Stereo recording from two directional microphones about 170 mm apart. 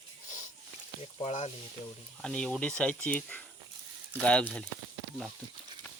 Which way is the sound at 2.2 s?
5° left (ahead or behind).